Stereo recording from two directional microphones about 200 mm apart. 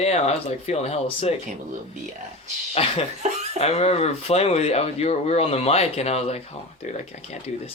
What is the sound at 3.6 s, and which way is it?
Speech, 30° left (ahead or behind).